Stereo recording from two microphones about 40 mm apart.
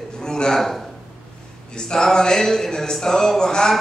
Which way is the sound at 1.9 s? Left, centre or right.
Centre.